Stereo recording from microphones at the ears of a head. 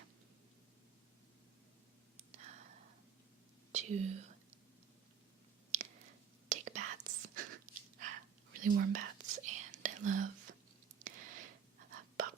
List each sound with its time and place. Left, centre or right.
2.1 s a sound: right
3.7 s speech: right
5.7 s whispering: right